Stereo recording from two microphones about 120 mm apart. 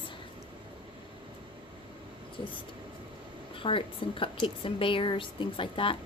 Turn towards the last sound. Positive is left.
turn(degrees=50)  # may be behind; listen again after turning